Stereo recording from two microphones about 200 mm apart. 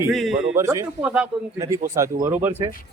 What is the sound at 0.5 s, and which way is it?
Speech, 15° right (ahead or behind).